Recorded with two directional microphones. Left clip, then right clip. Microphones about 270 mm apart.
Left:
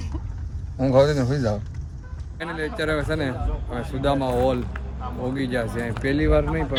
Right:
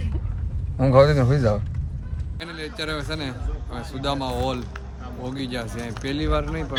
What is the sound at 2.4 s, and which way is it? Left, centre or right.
Speech, centre.